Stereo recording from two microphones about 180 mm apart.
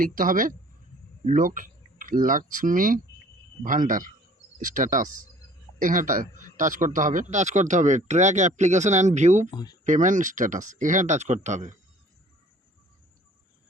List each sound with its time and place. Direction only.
0.0 s a man's voice: 50° right (ahead or behind)
9.5 s speech: 25° left (ahead or behind)
9.8 s a man's voice: 45° right (ahead or behind)